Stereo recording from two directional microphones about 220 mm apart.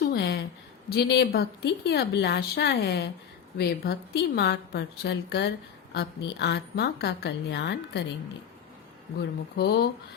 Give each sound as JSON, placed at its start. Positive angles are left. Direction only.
{"t": 0.0, "sound": "a sound", "side_deg": 50}
{"t": 0.9, "sound": "a woman's voice", "side_deg": 45}
{"t": 9.6, "sound": "a woman's voice", "side_deg": 45}